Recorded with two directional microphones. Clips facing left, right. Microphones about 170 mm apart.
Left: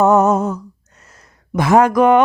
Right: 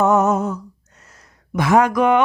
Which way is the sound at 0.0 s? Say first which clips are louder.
Left 3 dB; 35° left (ahead or behind).